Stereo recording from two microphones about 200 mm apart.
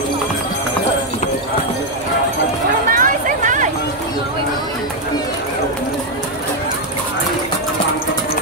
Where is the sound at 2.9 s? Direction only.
40° right (ahead or behind).